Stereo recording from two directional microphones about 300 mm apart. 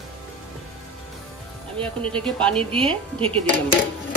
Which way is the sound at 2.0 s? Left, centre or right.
Centre.